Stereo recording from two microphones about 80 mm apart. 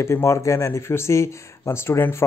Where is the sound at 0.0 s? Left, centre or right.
Left.